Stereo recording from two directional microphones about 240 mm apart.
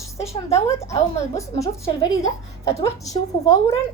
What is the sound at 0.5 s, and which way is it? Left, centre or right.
A woman's voice, centre.